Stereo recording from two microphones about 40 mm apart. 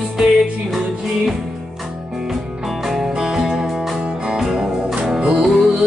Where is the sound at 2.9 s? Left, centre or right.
Centre.